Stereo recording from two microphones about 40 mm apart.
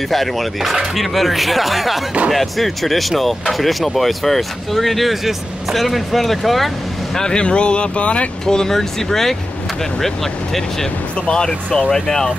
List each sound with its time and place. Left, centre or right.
0.1 s speech: centre
7.2 s speech: centre
8.5 s speech: centre
11.2 s speech: centre